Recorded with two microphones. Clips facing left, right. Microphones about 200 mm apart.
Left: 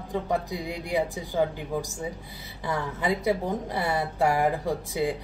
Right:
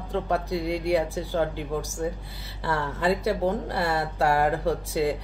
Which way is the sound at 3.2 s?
65° right (ahead or behind).